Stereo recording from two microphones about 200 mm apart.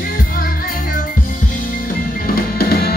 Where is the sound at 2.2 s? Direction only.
50° left (ahead or behind).